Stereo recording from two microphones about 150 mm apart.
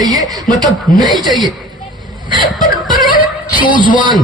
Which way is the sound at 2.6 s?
30° right (ahead or behind).